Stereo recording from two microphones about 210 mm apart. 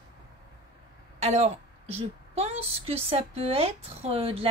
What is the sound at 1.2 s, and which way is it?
A woman's voice, 30° right (ahead or behind).